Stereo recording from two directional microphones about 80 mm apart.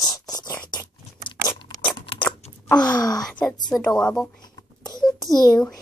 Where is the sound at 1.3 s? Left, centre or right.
Left.